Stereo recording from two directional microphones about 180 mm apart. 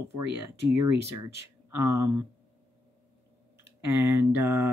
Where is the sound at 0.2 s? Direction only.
10° right (ahead or behind).